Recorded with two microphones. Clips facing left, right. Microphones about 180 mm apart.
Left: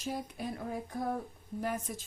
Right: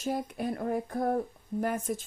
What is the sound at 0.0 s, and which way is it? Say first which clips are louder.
Speech: right 6 dB; 55° right (ahead or behind).